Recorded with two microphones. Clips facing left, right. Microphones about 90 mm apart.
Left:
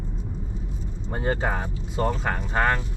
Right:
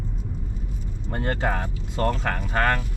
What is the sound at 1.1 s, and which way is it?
Speech, 10° left (ahead or behind).